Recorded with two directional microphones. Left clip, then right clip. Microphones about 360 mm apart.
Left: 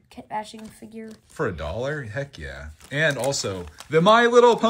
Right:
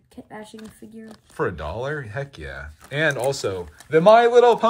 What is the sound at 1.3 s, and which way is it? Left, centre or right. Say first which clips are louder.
Speech: right 1 dB; centre.